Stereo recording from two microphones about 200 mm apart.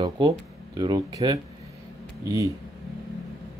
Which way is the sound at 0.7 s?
20° right (ahead or behind).